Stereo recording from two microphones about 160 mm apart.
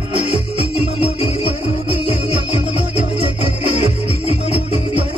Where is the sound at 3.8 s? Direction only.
40° left (ahead or behind).